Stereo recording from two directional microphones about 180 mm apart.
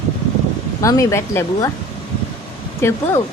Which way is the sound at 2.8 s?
15° left (ahead or behind).